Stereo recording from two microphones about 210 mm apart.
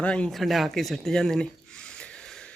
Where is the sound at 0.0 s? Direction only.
5° left (ahead or behind).